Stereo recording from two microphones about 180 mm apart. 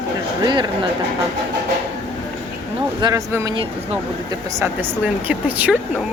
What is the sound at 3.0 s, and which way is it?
Speech, 15° right (ahead or behind).